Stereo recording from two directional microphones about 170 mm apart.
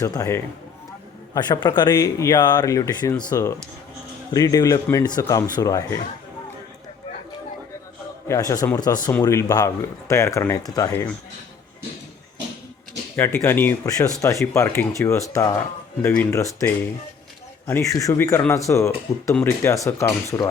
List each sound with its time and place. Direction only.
0.0 s speech: 20° left (ahead or behind)
8.3 s speech: 20° left (ahead or behind)
13.1 s speech: 15° left (ahead or behind)